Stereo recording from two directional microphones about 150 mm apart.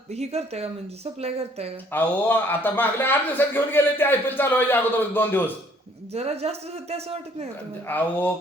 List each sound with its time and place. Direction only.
0.1 s a man's voice: 45° right (ahead or behind)
1.9 s a man's voice: 15° left (ahead or behind)
6.1 s a man's voice: 45° right (ahead or behind)
7.9 s a man's voice: 10° left (ahead or behind)